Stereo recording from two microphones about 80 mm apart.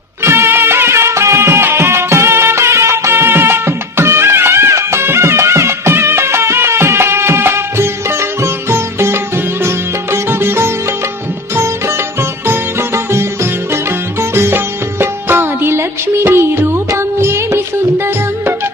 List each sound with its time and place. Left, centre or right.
0.2 s music: right
9.6 s sitar: right
14.2 s music: right